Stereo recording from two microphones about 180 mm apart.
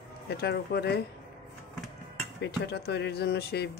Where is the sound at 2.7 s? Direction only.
65° left (ahead or behind).